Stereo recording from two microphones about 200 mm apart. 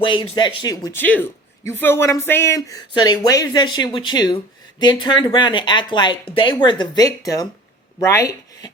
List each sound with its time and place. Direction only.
0.0 s speech: 25° left (ahead or behind)